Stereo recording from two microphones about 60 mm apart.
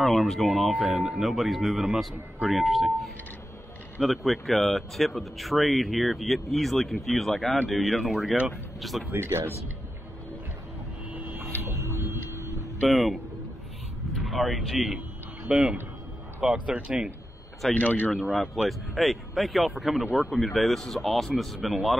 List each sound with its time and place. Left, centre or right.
0.0 s speech: centre
9.1 s speech: right
11.3 s printer: right
12.8 s speech: centre
14.2 s speech: centre
15.5 s speech: right
17.7 s speech: left
18.3 s speech: centre